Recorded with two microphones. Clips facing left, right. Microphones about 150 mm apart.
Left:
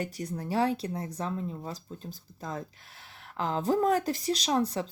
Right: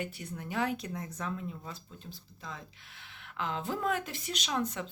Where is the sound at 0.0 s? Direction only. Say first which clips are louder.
Left 5 dB; 40° left (ahead or behind).